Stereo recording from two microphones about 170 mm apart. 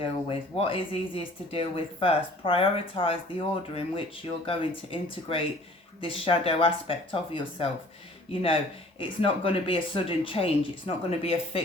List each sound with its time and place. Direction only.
0.0 s speech: 30° left (ahead or behind)